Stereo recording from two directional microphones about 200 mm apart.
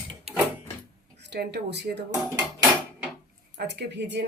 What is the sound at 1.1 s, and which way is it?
Speech, 55° right (ahead or behind).